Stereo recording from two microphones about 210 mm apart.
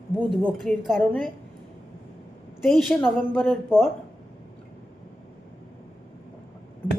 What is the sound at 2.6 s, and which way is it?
A woman's voice, 5° left (ahead or behind).